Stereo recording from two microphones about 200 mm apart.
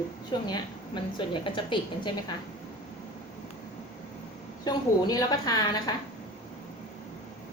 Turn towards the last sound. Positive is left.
turn(degrees=20)  # may be behind; listen again after turning